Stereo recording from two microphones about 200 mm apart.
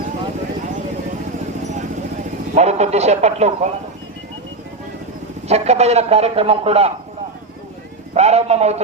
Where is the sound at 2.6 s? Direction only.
35° right (ahead or behind).